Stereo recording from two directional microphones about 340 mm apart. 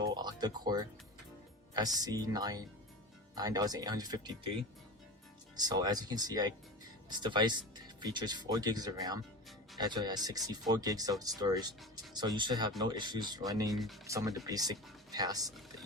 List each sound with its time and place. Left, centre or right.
0.0 s music: centre
1.7 s speech: centre
5.5 s speech: centre